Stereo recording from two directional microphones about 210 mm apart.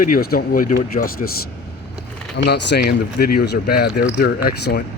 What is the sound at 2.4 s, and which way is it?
Speech, 55° left (ahead or behind).